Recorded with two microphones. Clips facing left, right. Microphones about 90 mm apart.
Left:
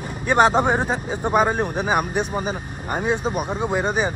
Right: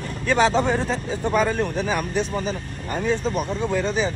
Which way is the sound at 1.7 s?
55° left (ahead or behind).